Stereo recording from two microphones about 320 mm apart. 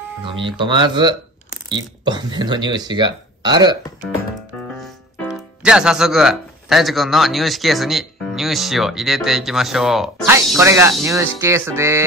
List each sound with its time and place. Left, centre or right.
0.2 s speech: centre
4.1 s speech: centre